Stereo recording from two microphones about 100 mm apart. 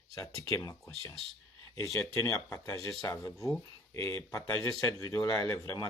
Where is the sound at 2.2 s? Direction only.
30° left (ahead or behind).